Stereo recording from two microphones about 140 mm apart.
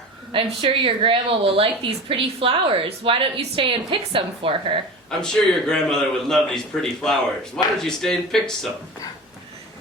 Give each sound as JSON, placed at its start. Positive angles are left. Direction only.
{"t": 0.3, "sound": "speech", "side_deg": -40}
{"t": 5.2, "sound": "a man's voice", "side_deg": 5}